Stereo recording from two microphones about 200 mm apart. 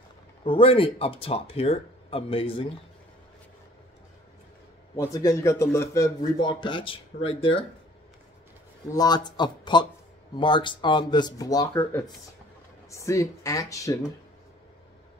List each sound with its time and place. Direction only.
0.4 s a man's voice: 25° left (ahead or behind)
4.9 s a man's voice: 15° left (ahead or behind)
8.9 s a man's voice: 20° left (ahead or behind)